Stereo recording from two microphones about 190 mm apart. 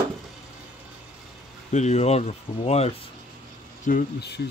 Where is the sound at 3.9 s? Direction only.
55° left (ahead or behind).